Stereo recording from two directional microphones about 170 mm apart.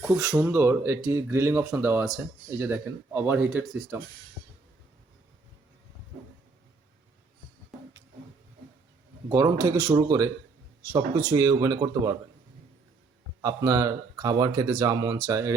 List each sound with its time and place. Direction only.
0.2 s speech: 15° right (ahead or behind); by 3.9 s centre (ahead or behind)
9.3 s speech: 20° right (ahead or behind)
11.3 s speech: 20° right (ahead or behind)
13.4 s speech: 20° right (ahead or behind)